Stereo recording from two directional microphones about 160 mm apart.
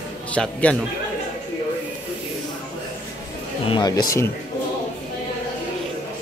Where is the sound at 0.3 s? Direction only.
10° left (ahead or behind).